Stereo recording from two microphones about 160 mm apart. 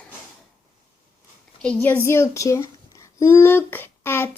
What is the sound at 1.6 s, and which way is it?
A child's voice, 10° left (ahead or behind).